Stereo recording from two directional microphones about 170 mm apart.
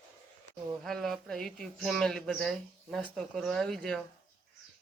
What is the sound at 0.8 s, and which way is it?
Speech, centre (ahead or behind).